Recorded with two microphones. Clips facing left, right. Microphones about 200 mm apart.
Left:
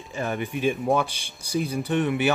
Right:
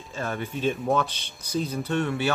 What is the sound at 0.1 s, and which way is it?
Speech, 15° left (ahead or behind).